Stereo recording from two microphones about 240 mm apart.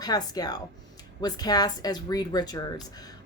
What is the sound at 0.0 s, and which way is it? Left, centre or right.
A woman's voice, centre.